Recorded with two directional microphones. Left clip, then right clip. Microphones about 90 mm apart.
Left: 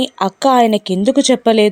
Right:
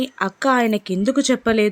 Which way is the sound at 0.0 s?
40° left (ahead or behind).